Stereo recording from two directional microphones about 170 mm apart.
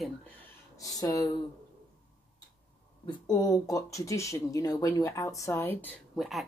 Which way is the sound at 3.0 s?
20° left (ahead or behind).